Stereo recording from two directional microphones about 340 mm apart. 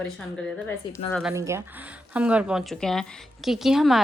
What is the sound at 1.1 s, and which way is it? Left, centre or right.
A woman's voice, centre.